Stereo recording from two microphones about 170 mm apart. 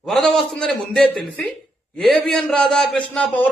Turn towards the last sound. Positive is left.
turn(degrees=10)  # may be behind; listen again after turning